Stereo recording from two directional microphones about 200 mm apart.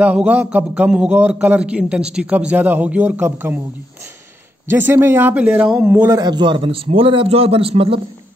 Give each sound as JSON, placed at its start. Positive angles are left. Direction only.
{"t": 0.0, "sound": "a man's voice", "side_deg": -5}
{"t": 4.6, "sound": "a man's voice", "side_deg": -10}